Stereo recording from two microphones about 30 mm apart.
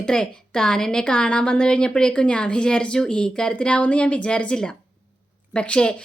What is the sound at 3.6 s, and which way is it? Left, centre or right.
Speech, left.